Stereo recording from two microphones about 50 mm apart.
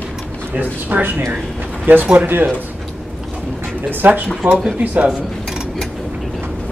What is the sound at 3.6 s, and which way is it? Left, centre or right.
Speech, right.